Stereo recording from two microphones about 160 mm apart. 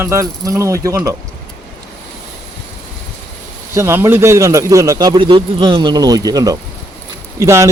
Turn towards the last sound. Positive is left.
turn(degrees=-20)  # may be behind; listen again after turning